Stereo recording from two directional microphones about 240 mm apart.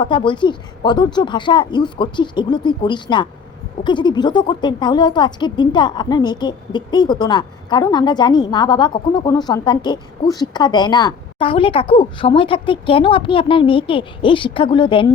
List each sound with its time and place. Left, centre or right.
0.0 s a woman's voice: centre